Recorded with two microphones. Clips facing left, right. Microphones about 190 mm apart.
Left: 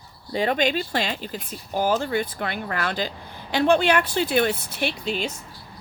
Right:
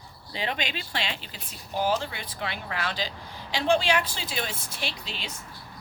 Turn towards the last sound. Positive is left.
turn(degrees=50)  # may be behind; listen again after turning